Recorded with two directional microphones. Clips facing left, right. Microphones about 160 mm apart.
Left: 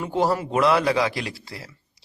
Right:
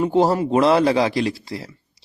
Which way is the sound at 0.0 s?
25° right (ahead or behind).